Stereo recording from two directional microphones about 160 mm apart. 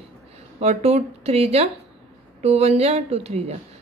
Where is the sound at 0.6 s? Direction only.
45° right (ahead or behind).